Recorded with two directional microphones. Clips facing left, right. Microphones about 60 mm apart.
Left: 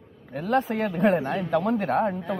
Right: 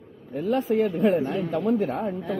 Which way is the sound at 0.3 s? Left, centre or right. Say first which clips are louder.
Right 1 dB; left.